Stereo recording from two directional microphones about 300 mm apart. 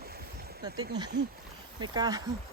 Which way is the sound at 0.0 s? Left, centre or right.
Right.